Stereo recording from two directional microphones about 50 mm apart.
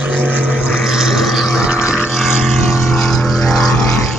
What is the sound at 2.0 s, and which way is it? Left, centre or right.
Boat, centre.